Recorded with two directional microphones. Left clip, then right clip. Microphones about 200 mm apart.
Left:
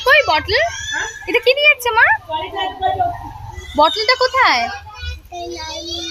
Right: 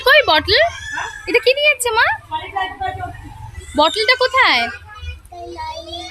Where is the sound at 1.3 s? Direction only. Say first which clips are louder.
Left 1 dB; 5° right (ahead or behind).